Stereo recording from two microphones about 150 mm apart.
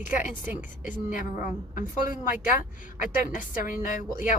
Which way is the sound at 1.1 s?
65° left (ahead or behind).